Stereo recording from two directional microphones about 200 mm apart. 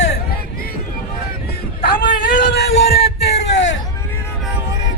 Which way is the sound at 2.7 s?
30° left (ahead or behind).